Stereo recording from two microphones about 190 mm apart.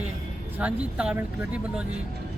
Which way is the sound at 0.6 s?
5° right (ahead or behind).